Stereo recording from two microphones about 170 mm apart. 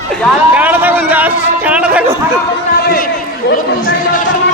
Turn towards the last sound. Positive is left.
turn(degrees=75)  # may be behind; listen again after turning